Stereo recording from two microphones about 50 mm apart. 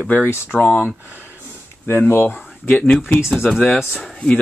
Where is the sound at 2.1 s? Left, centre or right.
Left.